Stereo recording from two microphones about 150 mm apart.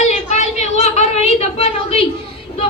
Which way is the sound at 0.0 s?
50° left (ahead or behind).